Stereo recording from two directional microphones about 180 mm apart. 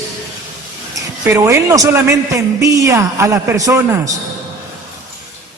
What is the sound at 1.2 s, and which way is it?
A man's voice, 15° right (ahead or behind).